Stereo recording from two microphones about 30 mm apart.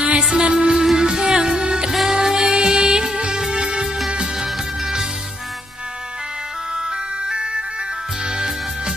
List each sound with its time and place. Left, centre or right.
0.3 s music: right
1.9 s music: centre
2.2 s music: right
4.4 s music: centre
7.2 s music: right